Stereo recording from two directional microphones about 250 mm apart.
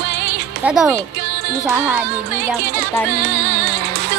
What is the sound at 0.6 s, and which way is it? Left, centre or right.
Speech, centre.